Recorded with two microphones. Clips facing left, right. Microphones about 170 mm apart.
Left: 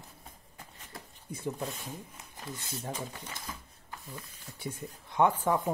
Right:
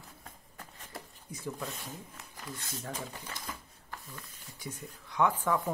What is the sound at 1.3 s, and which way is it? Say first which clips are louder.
Speech: left 4 dB; 25° left (ahead or behind).